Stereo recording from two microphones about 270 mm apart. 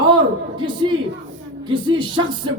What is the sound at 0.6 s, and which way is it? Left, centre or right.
Speech, centre.